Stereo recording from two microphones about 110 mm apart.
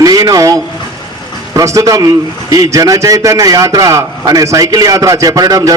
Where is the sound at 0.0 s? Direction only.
35° right (ahead or behind).